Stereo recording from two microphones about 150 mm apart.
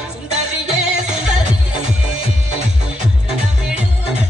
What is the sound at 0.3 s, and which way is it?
Music, 50° right (ahead or behind).